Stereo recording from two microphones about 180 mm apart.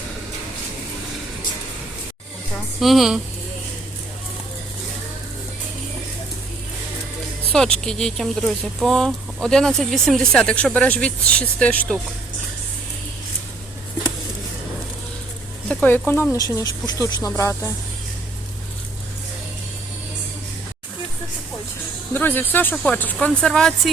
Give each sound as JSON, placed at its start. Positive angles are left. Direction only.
{"t": 2.8, "sound": "speech", "side_deg": 0}
{"t": 7.5, "sound": "speech", "side_deg": 5}
{"t": 15.7, "sound": "speech", "side_deg": 10}
{"t": 22.1, "sound": "speech", "side_deg": 10}